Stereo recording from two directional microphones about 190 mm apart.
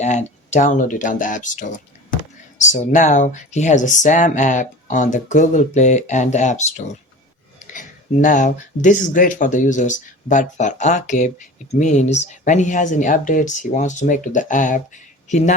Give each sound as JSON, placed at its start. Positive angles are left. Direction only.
{"t": 0.0, "sound": "speech", "side_deg": 35}